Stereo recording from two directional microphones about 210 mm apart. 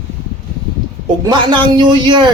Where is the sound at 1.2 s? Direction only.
20° right (ahead or behind).